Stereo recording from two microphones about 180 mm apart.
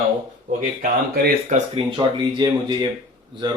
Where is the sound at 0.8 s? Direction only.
45° right (ahead or behind).